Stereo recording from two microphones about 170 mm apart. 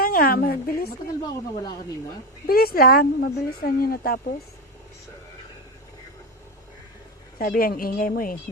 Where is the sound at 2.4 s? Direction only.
65° left (ahead or behind).